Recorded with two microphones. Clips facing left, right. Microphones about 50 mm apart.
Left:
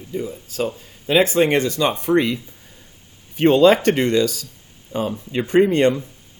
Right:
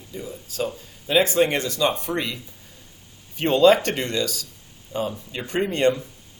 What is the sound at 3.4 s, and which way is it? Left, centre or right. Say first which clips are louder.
Speech: left 3 dB; left.